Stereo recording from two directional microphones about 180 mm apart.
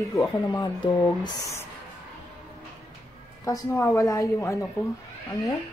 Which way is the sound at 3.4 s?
15° left (ahead or behind).